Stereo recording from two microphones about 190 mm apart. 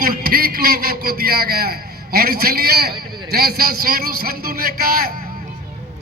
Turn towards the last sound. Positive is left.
turn(degrees=-50)  # may be behind; listen again after turning